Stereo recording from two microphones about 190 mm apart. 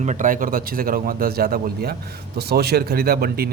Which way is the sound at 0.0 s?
40° right (ahead or behind).